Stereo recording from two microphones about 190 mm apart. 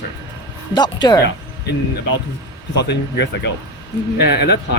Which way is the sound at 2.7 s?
65° left (ahead or behind).